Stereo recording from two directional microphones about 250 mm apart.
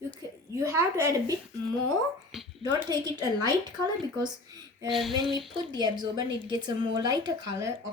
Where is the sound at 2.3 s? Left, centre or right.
Centre.